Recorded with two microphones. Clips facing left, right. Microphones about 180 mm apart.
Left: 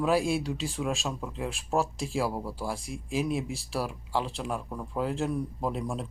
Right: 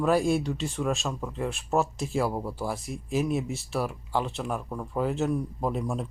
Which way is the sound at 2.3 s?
20° right (ahead or behind).